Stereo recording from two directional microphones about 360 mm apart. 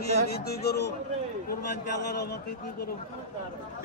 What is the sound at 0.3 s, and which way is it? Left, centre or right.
Speech, left.